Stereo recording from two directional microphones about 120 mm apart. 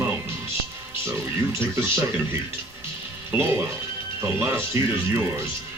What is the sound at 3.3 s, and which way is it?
Speech, 20° right (ahead or behind).